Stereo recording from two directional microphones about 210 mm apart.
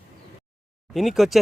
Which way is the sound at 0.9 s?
Centre (ahead or behind).